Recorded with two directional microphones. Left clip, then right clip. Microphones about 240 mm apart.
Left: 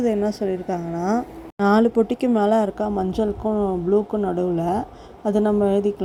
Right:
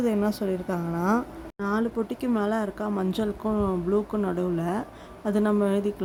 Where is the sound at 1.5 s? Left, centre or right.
Left.